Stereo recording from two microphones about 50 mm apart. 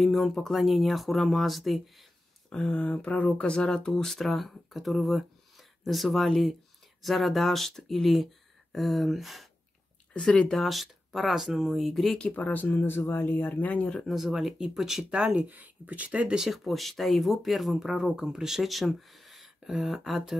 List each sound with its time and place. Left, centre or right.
0.0 s speech: centre
2.5 s speech: left
3.9 s speech: centre
10.1 s speech: centre
10.5 s speech: centre
12.3 s speech: left
12.7 s speech: left
14.0 s speech: centre
15.0 s speech: right
15.4 s speech: right
16.1 s speech: right
16.3 s speech: centre